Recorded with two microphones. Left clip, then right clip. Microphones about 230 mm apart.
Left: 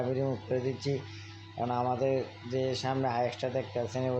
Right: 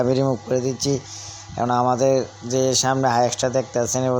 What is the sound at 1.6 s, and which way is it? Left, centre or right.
Speech, right.